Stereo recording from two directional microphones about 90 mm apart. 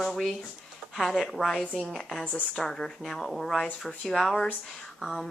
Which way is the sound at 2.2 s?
15° left (ahead or behind).